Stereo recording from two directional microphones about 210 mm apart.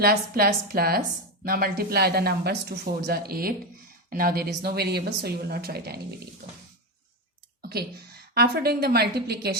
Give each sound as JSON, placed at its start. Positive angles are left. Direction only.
{"t": 0.0, "sound": "speech", "side_deg": -45}
{"t": 7.6, "sound": "a sound", "side_deg": -50}
{"t": 8.4, "sound": "speech", "side_deg": -50}